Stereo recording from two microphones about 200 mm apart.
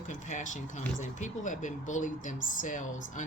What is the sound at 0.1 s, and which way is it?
Speech, 40° left (ahead or behind).